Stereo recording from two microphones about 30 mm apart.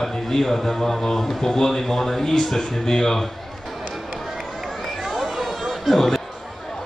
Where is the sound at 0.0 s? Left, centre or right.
Centre.